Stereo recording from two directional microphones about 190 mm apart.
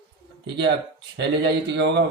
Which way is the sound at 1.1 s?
65° right (ahead or behind).